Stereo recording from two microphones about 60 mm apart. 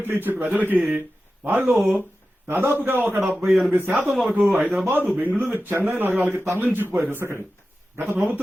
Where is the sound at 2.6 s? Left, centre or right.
Right.